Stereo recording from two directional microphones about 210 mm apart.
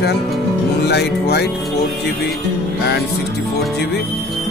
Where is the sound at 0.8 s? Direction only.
50° left (ahead or behind).